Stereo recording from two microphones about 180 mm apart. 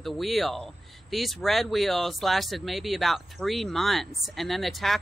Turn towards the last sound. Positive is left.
turn(degrees=0)  # may be behind; listen again after turning